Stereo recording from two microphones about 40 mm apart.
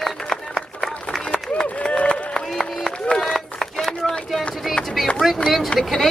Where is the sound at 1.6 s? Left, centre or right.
Left.